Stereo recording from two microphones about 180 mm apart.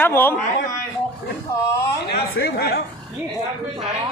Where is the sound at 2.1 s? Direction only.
60° left (ahead or behind).